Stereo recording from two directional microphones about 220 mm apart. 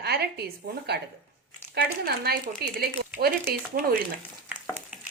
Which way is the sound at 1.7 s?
45° right (ahead or behind).